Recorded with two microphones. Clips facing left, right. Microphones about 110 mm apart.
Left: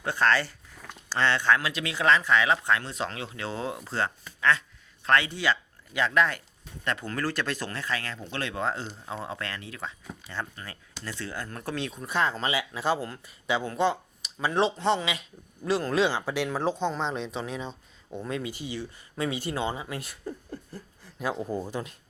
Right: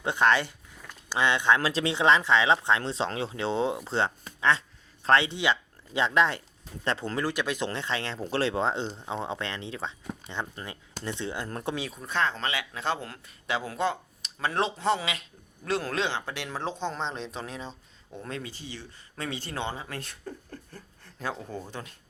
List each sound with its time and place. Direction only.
0.0 s speech: 20° right (ahead or behind)
7.2 s speech: 15° right (ahead or behind)
11.7 s speech: 5° right (ahead or behind)
12.0 s speech: 10° left (ahead or behind)
18.3 s speech: 15° left (ahead or behind)